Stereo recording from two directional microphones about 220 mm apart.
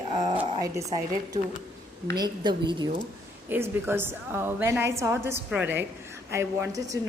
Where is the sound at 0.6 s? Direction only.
15° right (ahead or behind).